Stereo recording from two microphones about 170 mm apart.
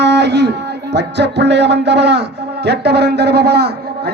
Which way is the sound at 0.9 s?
90° right.